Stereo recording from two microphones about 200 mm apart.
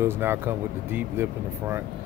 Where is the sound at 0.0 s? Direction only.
10° right (ahead or behind).